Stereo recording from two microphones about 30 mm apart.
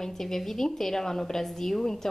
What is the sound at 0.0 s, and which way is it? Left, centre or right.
A woman's voice, centre.